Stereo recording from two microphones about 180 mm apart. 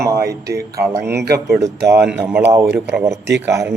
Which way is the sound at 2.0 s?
5° right (ahead or behind).